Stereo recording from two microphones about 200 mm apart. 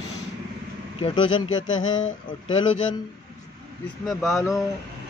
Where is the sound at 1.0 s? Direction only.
25° left (ahead or behind).